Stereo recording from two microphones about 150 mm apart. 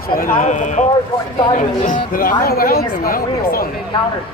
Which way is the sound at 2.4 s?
85° left.